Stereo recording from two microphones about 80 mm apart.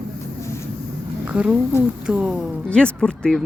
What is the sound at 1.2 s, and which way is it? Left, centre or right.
A woman's voice, centre.